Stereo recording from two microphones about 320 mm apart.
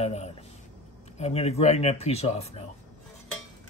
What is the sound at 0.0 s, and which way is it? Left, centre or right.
Speech, centre.